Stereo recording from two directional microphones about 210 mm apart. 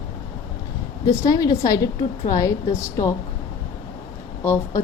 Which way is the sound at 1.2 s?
20° left (ahead or behind).